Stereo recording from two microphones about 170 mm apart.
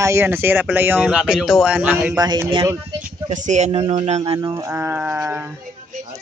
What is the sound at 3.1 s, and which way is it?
Speech, 45° right (ahead or behind).